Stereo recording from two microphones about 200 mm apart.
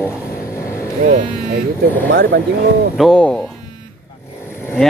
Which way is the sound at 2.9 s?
Centre (ahead or behind).